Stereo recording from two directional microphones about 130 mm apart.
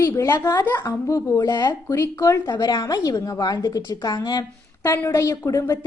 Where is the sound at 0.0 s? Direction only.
20° left (ahead or behind).